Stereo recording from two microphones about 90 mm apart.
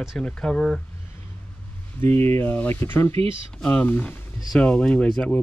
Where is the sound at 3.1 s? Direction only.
90° right.